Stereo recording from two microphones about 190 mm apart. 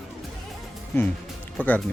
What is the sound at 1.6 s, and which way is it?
Speech, 10° left (ahead or behind).